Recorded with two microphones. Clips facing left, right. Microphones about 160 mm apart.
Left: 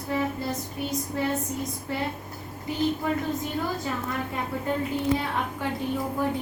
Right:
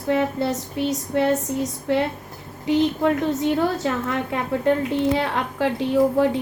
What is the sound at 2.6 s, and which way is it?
A woman's voice, 75° right (ahead or behind).